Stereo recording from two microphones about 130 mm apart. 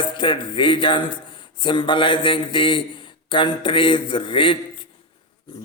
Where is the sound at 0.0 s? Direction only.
40° left (ahead or behind).